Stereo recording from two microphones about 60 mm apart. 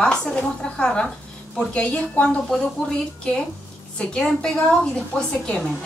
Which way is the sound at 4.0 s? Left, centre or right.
Centre.